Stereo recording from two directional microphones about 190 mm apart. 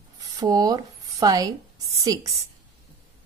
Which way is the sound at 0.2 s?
20° right (ahead or behind).